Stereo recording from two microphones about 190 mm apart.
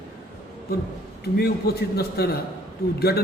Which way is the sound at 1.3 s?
55° left (ahead or behind).